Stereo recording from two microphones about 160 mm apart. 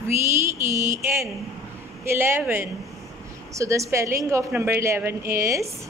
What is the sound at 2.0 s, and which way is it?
A woman's voice, 15° right (ahead or behind).